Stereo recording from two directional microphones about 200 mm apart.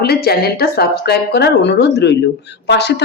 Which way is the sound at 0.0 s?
50° left (ahead or behind).